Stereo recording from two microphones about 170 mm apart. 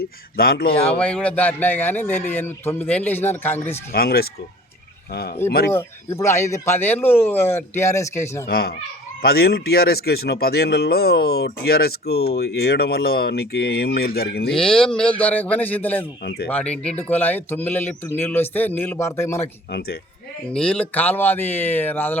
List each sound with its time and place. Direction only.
0.0 s speech: 65° left (ahead or behind)
0.9 s speech: 5° left (ahead or behind)
3.9 s speech: 65° left (ahead or behind)
5.7 s speech: 15° left (ahead or behind)
8.4 s speech: 65° left (ahead or behind)
14.5 s speech: 5° left (ahead or behind)
16.2 s speech: 65° left (ahead or behind)
16.5 s speech: 10° left (ahead or behind)
20.5 s speech: 5° left (ahead or behind)